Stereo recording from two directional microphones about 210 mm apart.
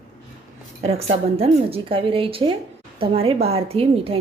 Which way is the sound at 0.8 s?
30° right (ahead or behind).